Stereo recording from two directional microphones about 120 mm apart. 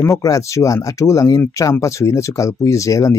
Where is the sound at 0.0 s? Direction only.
25° left (ahead or behind).